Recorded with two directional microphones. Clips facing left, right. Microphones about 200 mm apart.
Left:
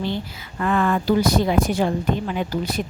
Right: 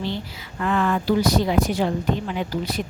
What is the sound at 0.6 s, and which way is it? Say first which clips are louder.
Speech: left 2 dB; 50° left (ahead or behind).